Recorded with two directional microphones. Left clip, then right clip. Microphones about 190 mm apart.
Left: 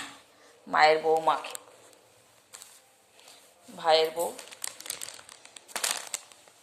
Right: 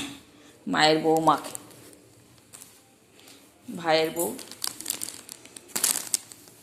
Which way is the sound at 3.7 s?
10° left (ahead or behind).